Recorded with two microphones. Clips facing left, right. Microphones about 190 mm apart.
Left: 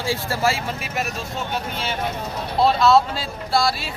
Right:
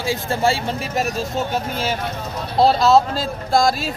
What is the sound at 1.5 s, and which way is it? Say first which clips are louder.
A man's voice: right 4 dB; 45° right (ahead or behind).